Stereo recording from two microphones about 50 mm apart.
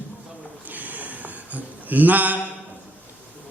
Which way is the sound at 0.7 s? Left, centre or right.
Right.